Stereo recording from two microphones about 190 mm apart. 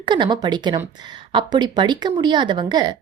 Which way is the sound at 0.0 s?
25° right (ahead or behind).